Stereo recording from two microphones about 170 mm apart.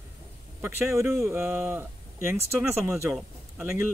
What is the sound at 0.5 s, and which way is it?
Speech, 15° right (ahead or behind).